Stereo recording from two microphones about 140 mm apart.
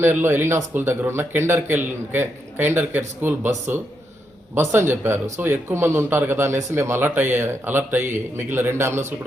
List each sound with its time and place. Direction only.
0.0 s speech: 15° right (ahead or behind)